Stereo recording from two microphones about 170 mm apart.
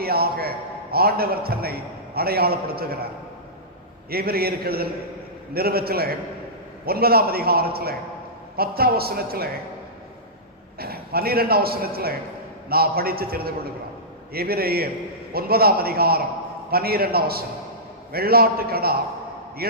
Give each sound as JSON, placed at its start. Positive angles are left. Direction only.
{"t": 0.0, "sound": "a man's voice", "side_deg": -65}
{"t": 4.1, "sound": "a man's voice", "side_deg": -65}
{"t": 10.8, "sound": "a man's voice", "side_deg": -65}